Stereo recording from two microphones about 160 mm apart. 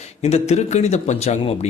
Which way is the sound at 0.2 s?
40° left (ahead or behind).